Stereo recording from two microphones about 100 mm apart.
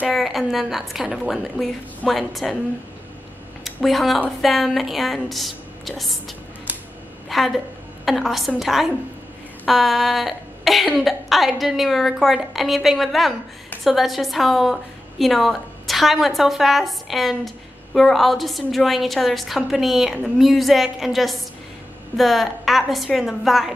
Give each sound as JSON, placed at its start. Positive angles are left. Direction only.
{"t": 0.1, "sound": "speech", "side_deg": 0}
{"t": 3.6, "sound": "a woman's voice", "side_deg": 0}